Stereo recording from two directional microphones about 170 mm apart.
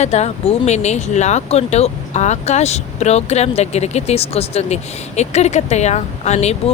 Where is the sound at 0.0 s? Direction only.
40° left (ahead or behind).